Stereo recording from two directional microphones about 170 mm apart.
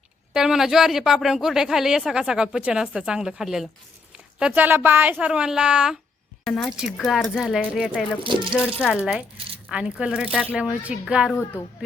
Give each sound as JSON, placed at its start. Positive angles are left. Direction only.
{"t": 0.3, "sound": "speech", "side_deg": -5}
{"t": 6.4, "sound": "speech", "side_deg": 10}
{"t": 6.7, "sound": "speech", "side_deg": -5}
{"t": 8.2, "sound": "speech", "side_deg": -30}
{"t": 8.8, "sound": "speech", "side_deg": -5}